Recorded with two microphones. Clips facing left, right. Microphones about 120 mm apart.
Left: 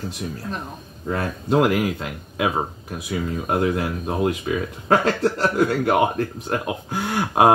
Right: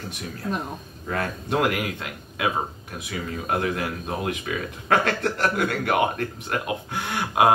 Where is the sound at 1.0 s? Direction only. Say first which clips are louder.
Left 3 dB; 25° left (ahead or behind).